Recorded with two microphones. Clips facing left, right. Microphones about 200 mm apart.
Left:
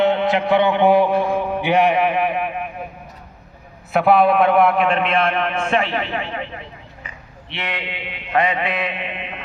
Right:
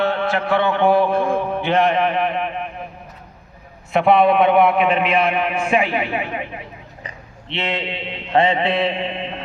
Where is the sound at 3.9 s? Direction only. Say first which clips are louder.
Even; centre (ahead or behind); by 6.5 s 15° right (ahead or behind).